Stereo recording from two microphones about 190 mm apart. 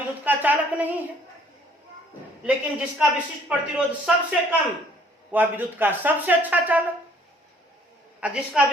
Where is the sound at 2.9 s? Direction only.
5° right (ahead or behind).